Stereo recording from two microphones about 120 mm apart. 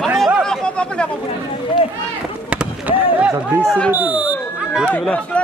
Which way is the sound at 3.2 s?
15° right (ahead or behind).